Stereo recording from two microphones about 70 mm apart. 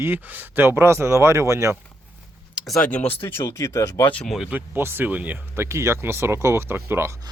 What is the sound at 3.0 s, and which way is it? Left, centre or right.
Speech, left.